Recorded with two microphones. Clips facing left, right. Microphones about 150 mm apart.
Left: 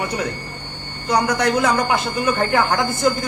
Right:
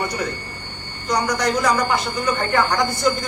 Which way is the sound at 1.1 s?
60° left (ahead or behind).